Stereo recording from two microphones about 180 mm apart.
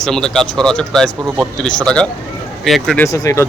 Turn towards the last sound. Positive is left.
turn(degrees=15)  # may be behind; listen again after turning